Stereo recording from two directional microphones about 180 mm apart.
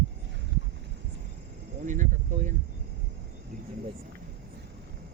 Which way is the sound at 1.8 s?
45° right (ahead or behind).